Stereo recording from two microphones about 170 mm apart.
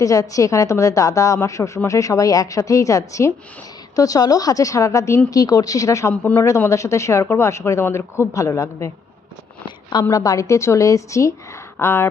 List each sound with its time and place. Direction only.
0.0 s a woman's voice: 20° left (ahead or behind)